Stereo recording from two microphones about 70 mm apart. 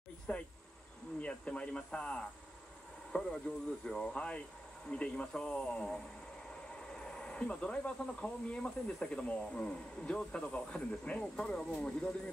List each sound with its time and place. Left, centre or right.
0.3 s speech: left